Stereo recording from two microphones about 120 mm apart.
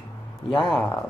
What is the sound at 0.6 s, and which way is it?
Speech, 10° left (ahead or behind).